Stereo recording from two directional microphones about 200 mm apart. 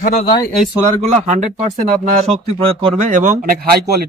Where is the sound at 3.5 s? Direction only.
50° right (ahead or behind).